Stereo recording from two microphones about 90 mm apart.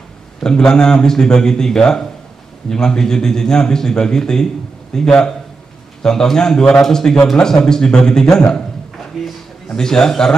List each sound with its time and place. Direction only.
0.4 s a man's voice: 5° left (ahead or behind)